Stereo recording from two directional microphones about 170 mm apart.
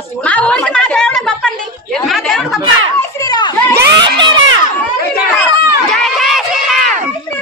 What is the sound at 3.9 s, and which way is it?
Speech, 25° right (ahead or behind).